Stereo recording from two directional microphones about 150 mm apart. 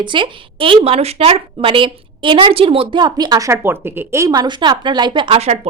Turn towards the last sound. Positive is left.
turn(degrees=-40)  # may be behind; listen again after turning